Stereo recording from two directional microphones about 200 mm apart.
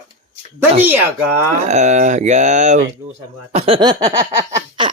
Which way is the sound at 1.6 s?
35° right (ahead or behind).